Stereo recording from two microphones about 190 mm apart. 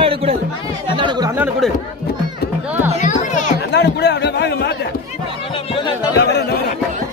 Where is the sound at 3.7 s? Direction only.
65° left (ahead or behind).